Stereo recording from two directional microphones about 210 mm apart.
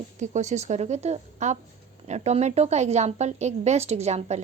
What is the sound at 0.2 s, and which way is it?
A woman's voice, 35° right (ahead or behind).